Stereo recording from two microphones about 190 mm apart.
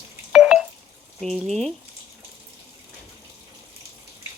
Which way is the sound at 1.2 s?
Centre (ahead or behind).